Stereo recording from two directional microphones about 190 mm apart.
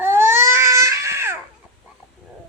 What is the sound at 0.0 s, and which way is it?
Crying, 10° right (ahead or behind).